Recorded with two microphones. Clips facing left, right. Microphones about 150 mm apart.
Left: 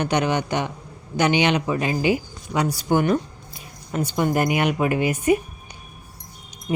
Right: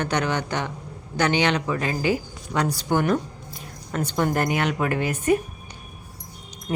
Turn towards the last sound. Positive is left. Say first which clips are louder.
# left 3 dB
turn(degrees=5)  # may be behind; listen again after turning